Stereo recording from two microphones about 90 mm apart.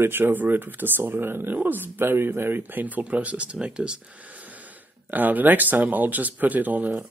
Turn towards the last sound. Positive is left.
turn(degrees=-20)  # may be behind; listen again after turning